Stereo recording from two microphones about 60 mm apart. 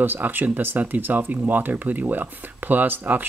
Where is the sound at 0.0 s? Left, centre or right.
Right.